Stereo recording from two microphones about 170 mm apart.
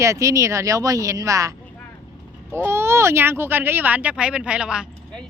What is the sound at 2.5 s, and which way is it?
A woman's voice, 15° right (ahead or behind).